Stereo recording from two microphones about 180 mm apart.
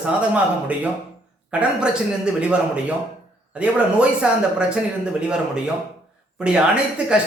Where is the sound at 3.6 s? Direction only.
5° right (ahead or behind).